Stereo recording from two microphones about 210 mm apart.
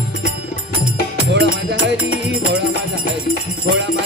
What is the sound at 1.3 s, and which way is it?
Music, 55° right (ahead or behind).